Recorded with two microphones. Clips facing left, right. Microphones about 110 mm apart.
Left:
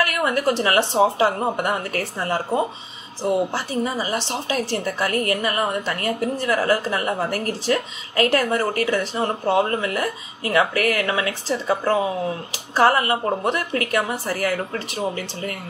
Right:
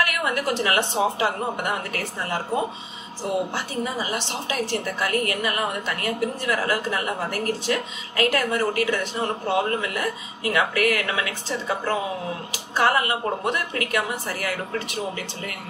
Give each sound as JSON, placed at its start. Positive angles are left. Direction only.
{"t": 0.0, "sound": "a woman's voice", "side_deg": 35}
{"t": 3.5, "sound": "a woman's voice", "side_deg": 35}